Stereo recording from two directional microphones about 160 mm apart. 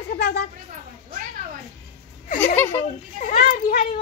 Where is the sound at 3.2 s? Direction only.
55° left (ahead or behind).